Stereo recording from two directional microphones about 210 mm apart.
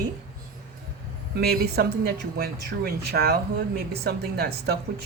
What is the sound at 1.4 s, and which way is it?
Speech, 50° right (ahead or behind).